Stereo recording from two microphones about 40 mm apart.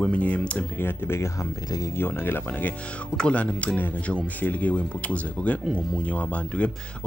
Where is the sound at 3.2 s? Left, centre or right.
Left.